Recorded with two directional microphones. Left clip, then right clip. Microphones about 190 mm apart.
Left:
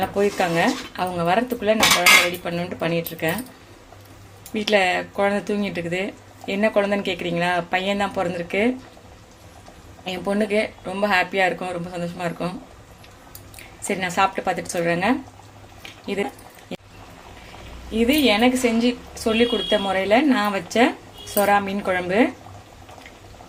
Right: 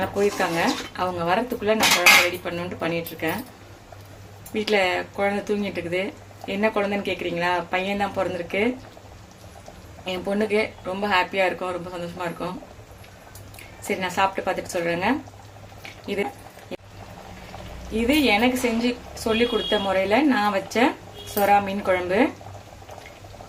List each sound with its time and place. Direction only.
0.3 s speech: 15° left (ahead or behind)
4.5 s speech: 15° left (ahead or behind)
10.0 s speech: 20° left (ahead or behind)
13.8 s speech: 20° left (ahead or behind)
17.9 s speech: 15° left (ahead or behind)